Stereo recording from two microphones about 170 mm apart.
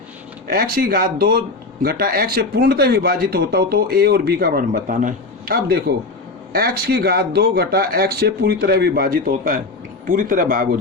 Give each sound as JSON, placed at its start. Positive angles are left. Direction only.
{"t": 0.5, "sound": "a man's voice", "side_deg": -60}